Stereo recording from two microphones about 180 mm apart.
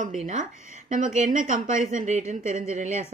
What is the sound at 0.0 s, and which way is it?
A woman's voice, 45° right (ahead or behind).